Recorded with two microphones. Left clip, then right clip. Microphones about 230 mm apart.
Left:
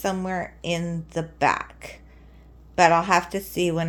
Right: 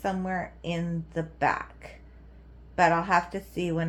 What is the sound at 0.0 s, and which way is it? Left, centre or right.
A woman's voice, left.